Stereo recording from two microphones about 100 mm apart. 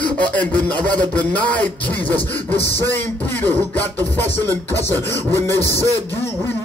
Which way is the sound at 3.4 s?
15° left (ahead or behind).